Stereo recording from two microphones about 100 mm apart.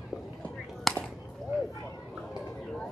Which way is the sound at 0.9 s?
Centre (ahead or behind).